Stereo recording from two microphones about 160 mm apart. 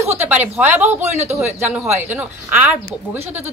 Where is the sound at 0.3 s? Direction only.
10° right (ahead or behind).